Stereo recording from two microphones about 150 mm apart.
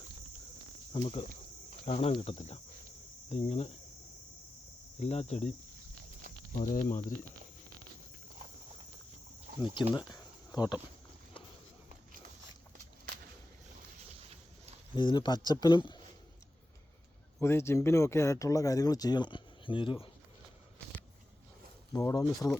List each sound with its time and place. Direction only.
0.9 s cricket: 40° left (ahead or behind)
1.8 s speech: 40° left (ahead or behind)
3.2 s cricket: 45° left (ahead or behind)
4.9 s cricket: 45° left (ahead or behind)
6.5 s speech: 65° left (ahead or behind)
10.1 s a sound: 25° left (ahead or behind)
14.9 s speech: 30° left (ahead or behind)
17.4 s speech: 15° left (ahead or behind); by 20.1 s 35° left (ahead or behind)
21.9 s speech: 20° left (ahead or behind)